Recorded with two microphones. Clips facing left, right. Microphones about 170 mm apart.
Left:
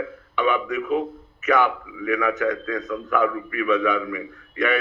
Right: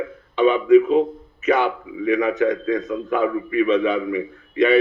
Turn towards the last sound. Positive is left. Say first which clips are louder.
# right 6 dB
turn(degrees=-25)  # may be behind; listen again after turning